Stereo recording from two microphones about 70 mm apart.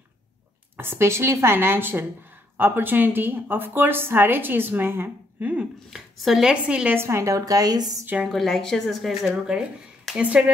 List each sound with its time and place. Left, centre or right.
0.7 s a woman's voice: right
5.9 s speech: centre
6.5 s a woman's voice: centre
7.0 s speech: right
8.3 s speech: centre
10.1 s a woman's voice: centre